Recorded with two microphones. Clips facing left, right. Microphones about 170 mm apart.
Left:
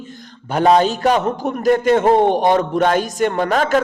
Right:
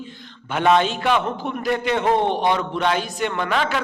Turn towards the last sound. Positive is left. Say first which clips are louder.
# left 6 dB
turn(degrees=45)  # may be behind; listen again after turning